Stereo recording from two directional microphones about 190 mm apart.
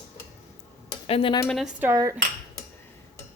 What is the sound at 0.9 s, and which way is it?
Cutlery, 30° left (ahead or behind).